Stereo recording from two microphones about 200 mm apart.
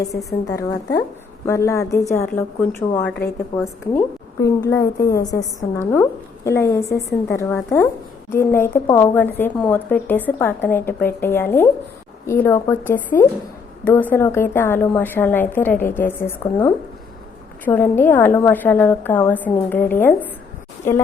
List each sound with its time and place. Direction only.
0.1 s a woman's voice: centre (ahead or behind)
0.4 s a woman's voice: 15° left (ahead or behind)
17.7 s a woman's voice: 10° left (ahead or behind)